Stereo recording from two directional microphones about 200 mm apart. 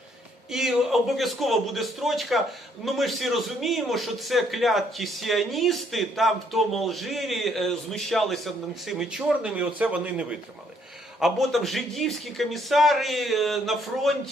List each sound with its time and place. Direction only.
0.5 s a man's voice: centre (ahead or behind)